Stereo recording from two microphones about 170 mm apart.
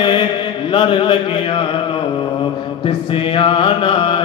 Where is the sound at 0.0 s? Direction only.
25° left (ahead or behind).